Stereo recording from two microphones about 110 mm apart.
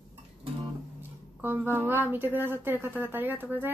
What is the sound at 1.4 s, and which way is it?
Speech, 20° right (ahead or behind).